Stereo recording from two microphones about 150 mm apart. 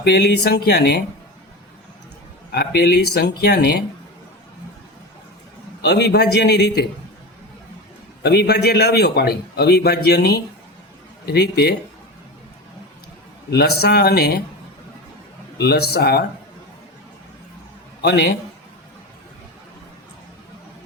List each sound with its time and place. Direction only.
0.0 s a man's voice: 90° left
2.5 s a man's voice: 90° left
6.0 s a man's voice: 90° left
8.2 s a man's voice: 90° left
13.5 s a man's voice: 90° left
15.5 s a man's voice: 90° left
18.0 s a man's voice: 90° left